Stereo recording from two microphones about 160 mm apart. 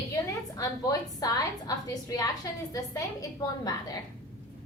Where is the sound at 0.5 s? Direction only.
20° left (ahead or behind).